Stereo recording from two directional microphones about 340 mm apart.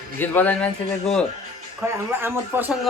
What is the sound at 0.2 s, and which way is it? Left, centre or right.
A man's voice, centre.